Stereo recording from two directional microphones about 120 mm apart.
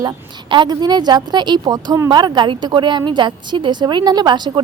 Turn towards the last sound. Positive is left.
turn(degrees=-40)  # may be behind; listen again after turning